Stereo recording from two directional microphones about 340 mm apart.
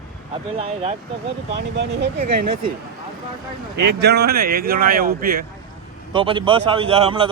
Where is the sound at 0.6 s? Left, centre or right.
Centre.